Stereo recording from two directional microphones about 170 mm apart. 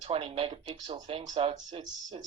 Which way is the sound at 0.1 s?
35° right (ahead or behind).